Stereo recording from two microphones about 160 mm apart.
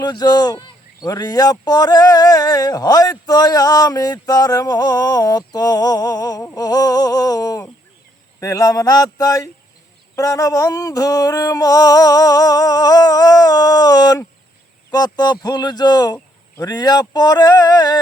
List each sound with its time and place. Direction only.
0.0 s speech: 25° left (ahead or behind)